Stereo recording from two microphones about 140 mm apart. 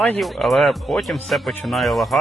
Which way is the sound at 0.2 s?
Centre (ahead or behind).